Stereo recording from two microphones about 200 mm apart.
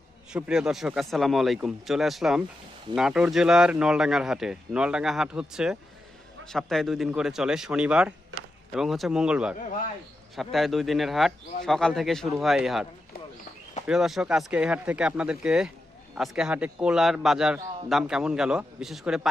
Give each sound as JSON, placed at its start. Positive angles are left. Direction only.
{"t": 0.3, "sound": "a man's voice", "side_deg": -5}
{"t": 9.6, "sound": "a man's voice", "side_deg": 40}
{"t": 10.3, "sound": "a man's voice", "side_deg": 0}
{"t": 13.8, "sound": "a man's voice", "side_deg": 0}